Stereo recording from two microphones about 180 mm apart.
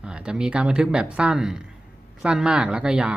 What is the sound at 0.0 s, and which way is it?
Speech, 5° right (ahead or behind).